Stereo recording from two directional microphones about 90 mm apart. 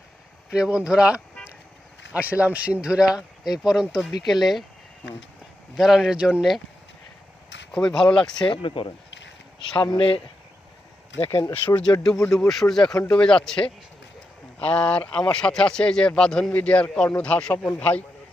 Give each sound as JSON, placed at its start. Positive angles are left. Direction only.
{"t": 0.5, "sound": "speech", "side_deg": -10}
{"t": 2.4, "sound": "speech", "side_deg": -15}
{"t": 5.7, "sound": "speech", "side_deg": -5}
{"t": 7.7, "sound": "speech", "side_deg": 10}
{"t": 8.4, "sound": "speech", "side_deg": 75}
{"t": 9.7, "sound": "speech", "side_deg": 65}
{"t": 11.6, "sound": "speech", "side_deg": 55}
{"t": 12.0, "sound": "speech", "side_deg": 5}
{"t": 14.7, "sound": "speech", "side_deg": 15}